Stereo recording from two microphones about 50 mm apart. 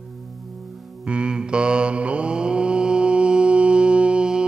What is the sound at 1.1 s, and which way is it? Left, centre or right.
Mantra, centre.